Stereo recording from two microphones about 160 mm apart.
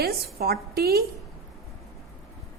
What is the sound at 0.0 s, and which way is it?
A woman's voice, 70° right (ahead or behind).